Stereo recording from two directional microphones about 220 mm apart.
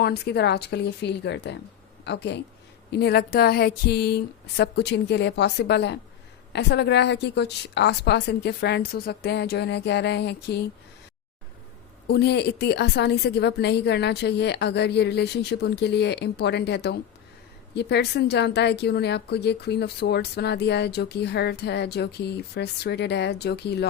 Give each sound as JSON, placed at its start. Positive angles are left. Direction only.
{"t": 0.0, "sound": "speech", "side_deg": 45}
{"t": 12.0, "sound": "speech", "side_deg": 45}